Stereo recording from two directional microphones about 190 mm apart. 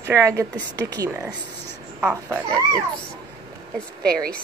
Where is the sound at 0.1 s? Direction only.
15° right (ahead or behind).